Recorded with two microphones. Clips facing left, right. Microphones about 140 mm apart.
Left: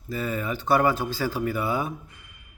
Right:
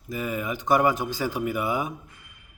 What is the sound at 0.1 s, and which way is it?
Speech, 15° right (ahead or behind).